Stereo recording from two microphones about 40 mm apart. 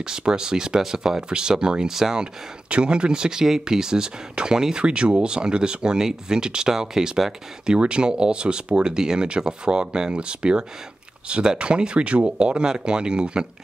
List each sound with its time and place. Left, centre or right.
0.0 s speech: centre
2.7 s speech: right
7.6 s speech: right